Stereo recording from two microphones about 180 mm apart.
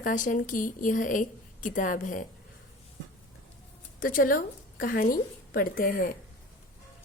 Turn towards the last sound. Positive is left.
turn(degrees=50)  # may be behind; listen again after turning